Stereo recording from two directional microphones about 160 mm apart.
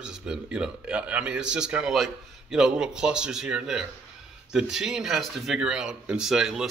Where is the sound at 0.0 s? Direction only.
5° right (ahead or behind).